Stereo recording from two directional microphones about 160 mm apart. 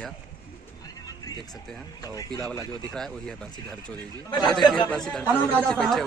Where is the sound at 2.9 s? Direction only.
5° left (ahead or behind).